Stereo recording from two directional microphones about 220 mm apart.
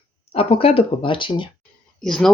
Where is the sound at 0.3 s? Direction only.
25° left (ahead or behind).